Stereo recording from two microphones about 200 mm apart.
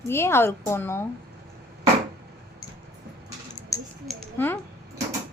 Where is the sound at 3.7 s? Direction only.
15° left (ahead or behind).